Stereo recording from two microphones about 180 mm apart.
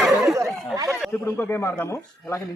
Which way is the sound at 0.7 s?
20° right (ahead or behind).